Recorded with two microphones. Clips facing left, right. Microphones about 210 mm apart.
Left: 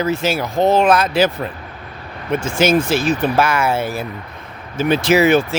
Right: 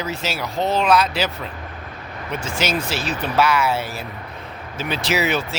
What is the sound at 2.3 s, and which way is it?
Speech, 50° left (ahead or behind).